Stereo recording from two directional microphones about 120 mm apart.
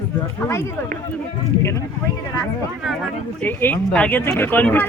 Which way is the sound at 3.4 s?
15° left (ahead or behind).